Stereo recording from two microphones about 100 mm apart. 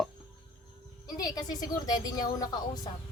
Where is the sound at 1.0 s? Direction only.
40° left (ahead or behind).